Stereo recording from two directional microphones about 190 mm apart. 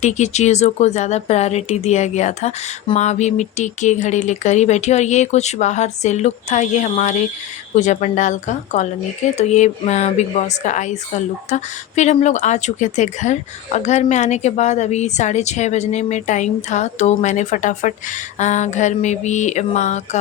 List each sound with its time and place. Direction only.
0.0 s speech: 35° left (ahead or behind)